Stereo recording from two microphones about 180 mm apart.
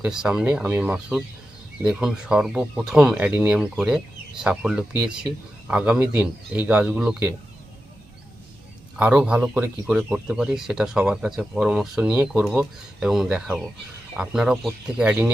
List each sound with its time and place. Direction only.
0.0 s speech: 5° right (ahead or behind)
9.0 s speech: 5° right (ahead or behind)